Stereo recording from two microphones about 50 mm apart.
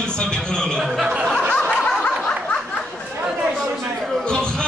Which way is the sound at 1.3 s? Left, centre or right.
Centre.